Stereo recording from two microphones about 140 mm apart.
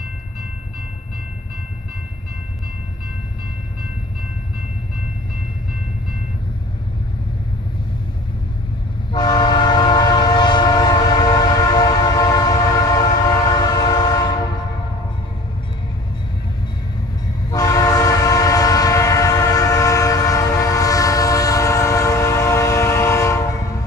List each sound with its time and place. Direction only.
9.1 s train: 30° left (ahead or behind)
17.5 s train: 25° left (ahead or behind)